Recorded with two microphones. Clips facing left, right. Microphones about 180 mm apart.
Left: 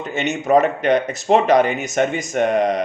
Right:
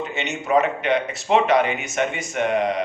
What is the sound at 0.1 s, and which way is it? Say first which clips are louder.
Speech: left 6 dB; 45° left (ahead or behind).